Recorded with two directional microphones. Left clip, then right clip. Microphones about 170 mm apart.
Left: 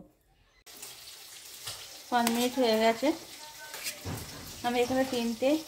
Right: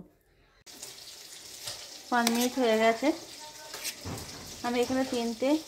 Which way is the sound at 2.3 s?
10° right (ahead or behind).